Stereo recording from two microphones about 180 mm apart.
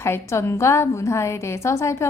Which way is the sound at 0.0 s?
15° left (ahead or behind).